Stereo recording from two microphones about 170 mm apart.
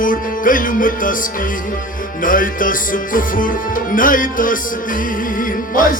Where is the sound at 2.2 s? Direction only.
55° left (ahead or behind).